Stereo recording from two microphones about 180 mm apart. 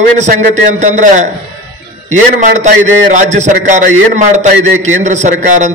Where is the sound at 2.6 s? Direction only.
40° right (ahead or behind).